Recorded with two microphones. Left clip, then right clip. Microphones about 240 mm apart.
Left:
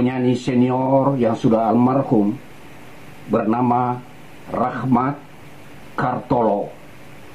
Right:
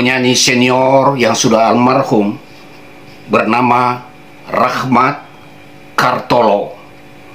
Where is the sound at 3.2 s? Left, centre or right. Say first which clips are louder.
Right 8 dB; centre.